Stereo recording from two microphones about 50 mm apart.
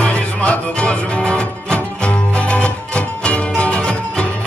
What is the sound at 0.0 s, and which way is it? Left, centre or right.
Music, left.